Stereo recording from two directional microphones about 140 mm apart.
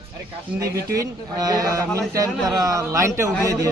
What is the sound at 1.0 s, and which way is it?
A man's voice, 25° right (ahead or behind).